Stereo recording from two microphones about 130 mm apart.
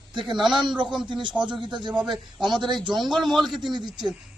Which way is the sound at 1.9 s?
5° right (ahead or behind).